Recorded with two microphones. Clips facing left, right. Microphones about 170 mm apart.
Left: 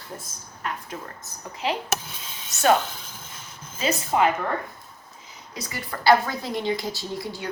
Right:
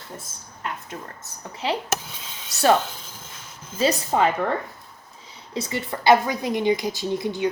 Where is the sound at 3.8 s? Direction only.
35° right (ahead or behind).